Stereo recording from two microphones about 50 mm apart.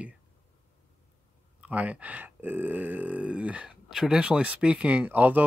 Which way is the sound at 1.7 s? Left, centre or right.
Right.